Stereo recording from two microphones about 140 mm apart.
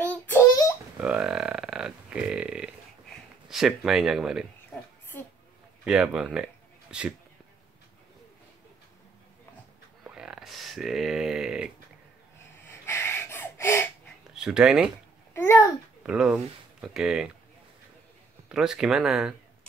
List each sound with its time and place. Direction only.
0.0 s a sound: 15° left (ahead or behind)
0.9 s a sound: 10° right (ahead or behind)
5.9 s speech: 5° right (ahead or behind)
10.0 s a sound: 5° right (ahead or behind)
12.6 s gasp: 15° left (ahead or behind)
14.3 s speech: 5° right (ahead or behind)
15.3 s babbling: 20° left (ahead or behind)
16.0 s speech: 5° right (ahead or behind)
18.5 s speech: 5° right (ahead or behind)